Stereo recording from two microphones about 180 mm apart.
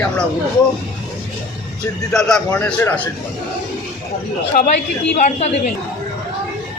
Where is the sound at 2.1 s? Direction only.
5° left (ahead or behind).